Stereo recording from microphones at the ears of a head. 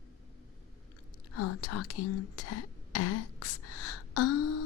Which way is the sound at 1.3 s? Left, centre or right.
Left.